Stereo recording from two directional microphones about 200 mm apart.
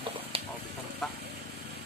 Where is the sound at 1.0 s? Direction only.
Centre (ahead or behind).